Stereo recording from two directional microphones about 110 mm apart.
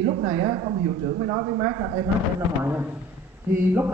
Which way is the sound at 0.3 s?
50° right (ahead or behind).